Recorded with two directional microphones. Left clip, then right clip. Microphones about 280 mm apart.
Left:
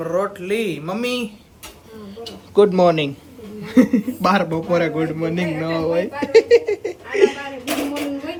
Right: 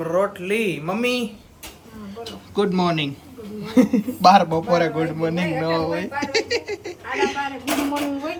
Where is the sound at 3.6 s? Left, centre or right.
Left.